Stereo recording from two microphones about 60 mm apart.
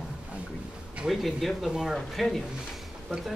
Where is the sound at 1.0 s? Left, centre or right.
Centre.